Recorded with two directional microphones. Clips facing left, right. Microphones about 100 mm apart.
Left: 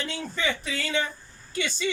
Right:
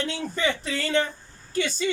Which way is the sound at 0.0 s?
55° right (ahead or behind).